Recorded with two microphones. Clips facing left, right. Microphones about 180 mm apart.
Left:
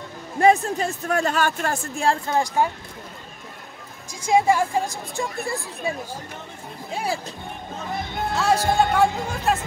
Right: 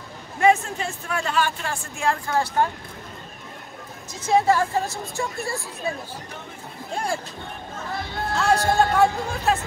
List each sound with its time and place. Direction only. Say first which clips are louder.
0.4 s speech: left 2 dB; 35° left (ahead or behind)
2.0 s a woman's voice: left 1 dB; 20° left (ahead or behind)
4.1 s a woman's voice: left 1 dB; 10° left (ahead or behind)
7.9 s speech: left 2 dB; 20° left (ahead or behind)
8.4 s speech: even; centre (ahead or behind)